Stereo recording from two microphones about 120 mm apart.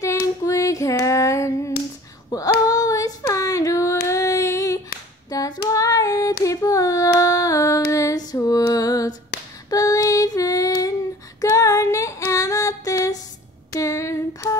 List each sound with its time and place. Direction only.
0.0 s female singing: 25° left (ahead or behind)
5.3 s child singing: 30° left (ahead or behind)
9.7 s female singing: 30° left (ahead or behind)